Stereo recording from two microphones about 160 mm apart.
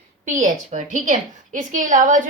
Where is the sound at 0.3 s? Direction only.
50° right (ahead or behind).